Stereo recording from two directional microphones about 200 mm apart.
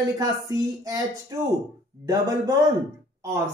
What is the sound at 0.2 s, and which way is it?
A man's voice, 20° right (ahead or behind).